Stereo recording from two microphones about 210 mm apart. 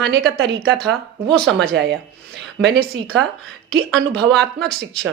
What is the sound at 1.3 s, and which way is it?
Speech, 5° left (ahead or behind).